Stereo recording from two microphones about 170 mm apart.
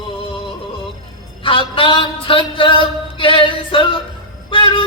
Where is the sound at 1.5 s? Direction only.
30° left (ahead or behind).